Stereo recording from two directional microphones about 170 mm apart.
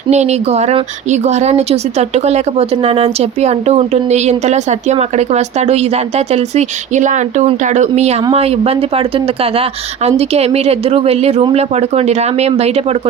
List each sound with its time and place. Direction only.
0.1 s speech: 40° right (ahead or behind)